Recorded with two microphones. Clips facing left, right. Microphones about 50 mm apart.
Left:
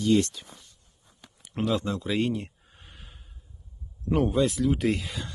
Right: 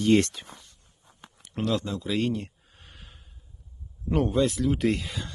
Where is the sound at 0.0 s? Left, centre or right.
Right.